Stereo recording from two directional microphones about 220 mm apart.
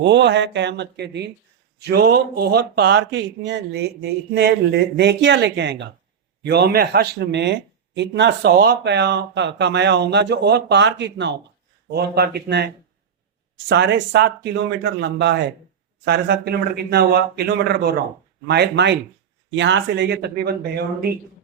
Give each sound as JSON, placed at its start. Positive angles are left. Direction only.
{"t": 0.0, "sound": "speech", "side_deg": -50}